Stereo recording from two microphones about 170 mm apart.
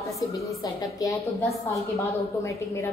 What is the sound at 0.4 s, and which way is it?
A woman's voice, 20° left (ahead or behind).